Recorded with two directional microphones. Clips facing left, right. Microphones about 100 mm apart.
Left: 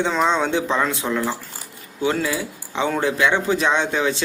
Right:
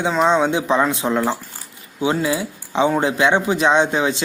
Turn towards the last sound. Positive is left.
turn(degrees=-20)  # may be behind; listen again after turning